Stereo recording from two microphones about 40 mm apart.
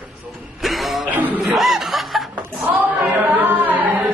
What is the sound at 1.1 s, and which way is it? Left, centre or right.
Music, right.